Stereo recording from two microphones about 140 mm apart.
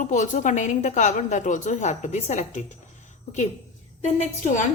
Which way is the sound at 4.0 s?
60° left (ahead or behind).